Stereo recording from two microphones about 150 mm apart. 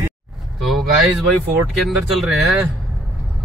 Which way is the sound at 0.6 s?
Centre (ahead or behind).